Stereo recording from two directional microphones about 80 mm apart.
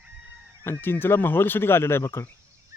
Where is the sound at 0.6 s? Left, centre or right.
Left.